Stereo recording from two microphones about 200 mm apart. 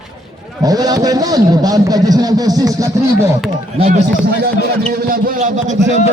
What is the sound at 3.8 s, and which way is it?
Speech, 35° right (ahead or behind).